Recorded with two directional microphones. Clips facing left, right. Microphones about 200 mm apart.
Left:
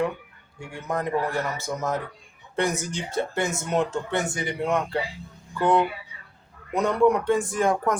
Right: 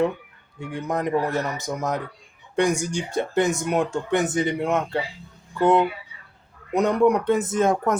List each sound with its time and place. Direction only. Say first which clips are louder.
0.6 s speech: right 3 dB; 15° right (ahead or behind)
6.7 s speech: right 2 dB; 20° right (ahead or behind)